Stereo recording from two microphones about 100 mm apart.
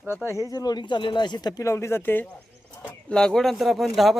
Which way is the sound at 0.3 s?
30° left (ahead or behind).